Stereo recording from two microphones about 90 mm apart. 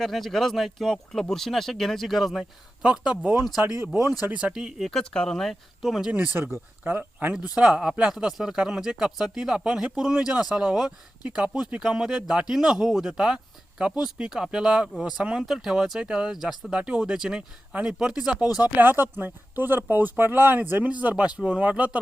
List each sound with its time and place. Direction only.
0.0 s speech: centre (ahead or behind)
3.6 s speech: 30° right (ahead or behind)
4.3 s speech: 15° right (ahead or behind)
4.9 s speech: 5° left (ahead or behind)
6.1 s speech: 15° right (ahead or behind)
7.3 s speech: 10° right (ahead or behind)